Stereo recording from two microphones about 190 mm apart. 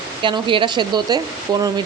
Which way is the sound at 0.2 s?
25° right (ahead or behind).